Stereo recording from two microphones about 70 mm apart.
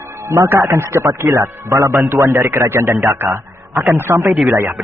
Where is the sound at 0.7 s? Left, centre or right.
Right.